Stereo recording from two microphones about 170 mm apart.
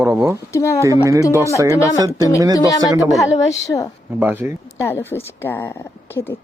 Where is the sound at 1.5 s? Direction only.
20° right (ahead or behind).